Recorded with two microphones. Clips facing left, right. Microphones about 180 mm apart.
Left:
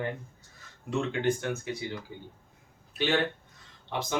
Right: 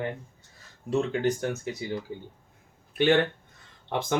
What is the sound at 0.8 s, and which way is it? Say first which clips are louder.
Speech: right 3 dB; 40° right (ahead or behind).